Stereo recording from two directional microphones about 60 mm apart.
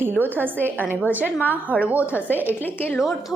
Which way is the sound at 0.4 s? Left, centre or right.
Right.